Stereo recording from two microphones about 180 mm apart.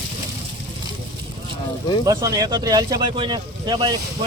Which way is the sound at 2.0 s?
20° right (ahead or behind).